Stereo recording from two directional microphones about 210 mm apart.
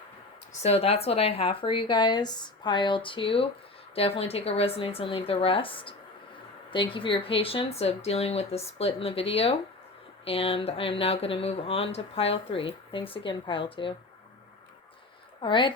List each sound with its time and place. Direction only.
0.6 s speech: 30° left (ahead or behind)
15.4 s speech: 20° left (ahead or behind)